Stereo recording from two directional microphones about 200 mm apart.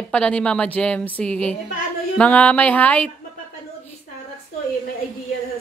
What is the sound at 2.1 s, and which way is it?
Music, 5° left (ahead or behind).